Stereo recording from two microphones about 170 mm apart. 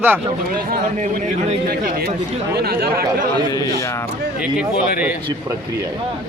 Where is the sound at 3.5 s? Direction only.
20° left (ahead or behind).